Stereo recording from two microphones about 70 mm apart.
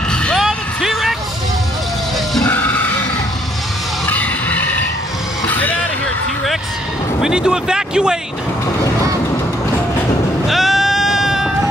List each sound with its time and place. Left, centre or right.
0.1 s a sound: centre
0.4 s music: centre
4.1 s music: left
7.2 s speech: centre
10.5 s sheep: centre